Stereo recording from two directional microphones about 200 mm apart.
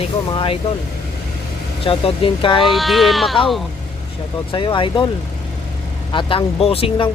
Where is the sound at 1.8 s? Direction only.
25° left (ahead or behind).